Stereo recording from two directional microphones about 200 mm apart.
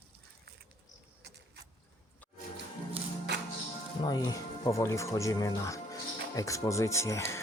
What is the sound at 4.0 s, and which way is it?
Speech, 20° left (ahead or behind).